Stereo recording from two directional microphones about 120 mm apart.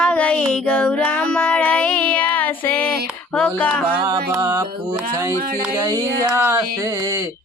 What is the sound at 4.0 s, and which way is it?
Music, 30° right (ahead or behind).